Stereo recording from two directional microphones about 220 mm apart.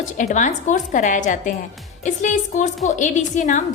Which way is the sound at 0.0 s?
35° left (ahead or behind).